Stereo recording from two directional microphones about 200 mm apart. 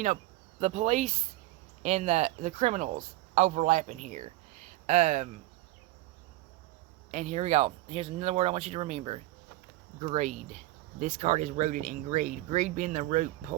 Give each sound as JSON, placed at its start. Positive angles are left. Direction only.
{"t": 0.6, "sound": "speech", "side_deg": -35}
{"t": 7.1, "sound": "speech", "side_deg": -35}